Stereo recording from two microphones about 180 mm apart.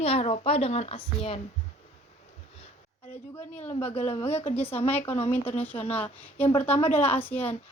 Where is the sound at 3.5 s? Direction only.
40° left (ahead or behind).